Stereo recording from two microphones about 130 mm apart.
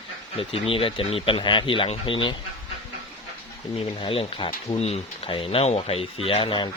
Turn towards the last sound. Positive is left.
turn(degrees=40)  # may be behind; listen again after turning